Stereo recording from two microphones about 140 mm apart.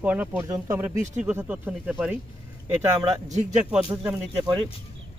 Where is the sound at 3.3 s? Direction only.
55° right (ahead or behind).